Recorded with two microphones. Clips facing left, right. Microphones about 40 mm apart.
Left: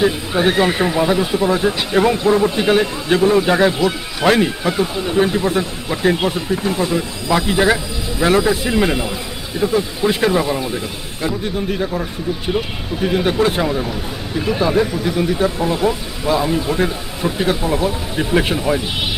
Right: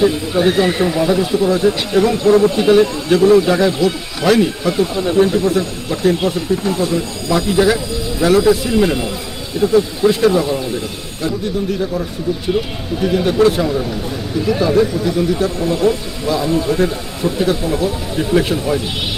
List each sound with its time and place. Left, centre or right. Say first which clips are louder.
0.0 s speech: right 2 dB; left
11.7 s speech: right 1 dB; left